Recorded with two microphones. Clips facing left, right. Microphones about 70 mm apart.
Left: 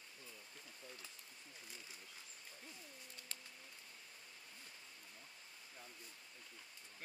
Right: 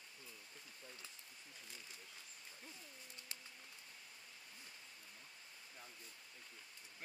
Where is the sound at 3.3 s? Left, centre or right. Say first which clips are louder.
Left 1 dB; centre.